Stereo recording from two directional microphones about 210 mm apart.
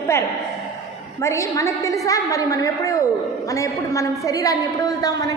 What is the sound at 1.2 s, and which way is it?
A woman's voice, 15° left (ahead or behind).